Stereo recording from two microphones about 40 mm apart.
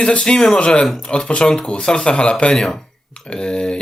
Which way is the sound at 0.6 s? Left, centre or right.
Left.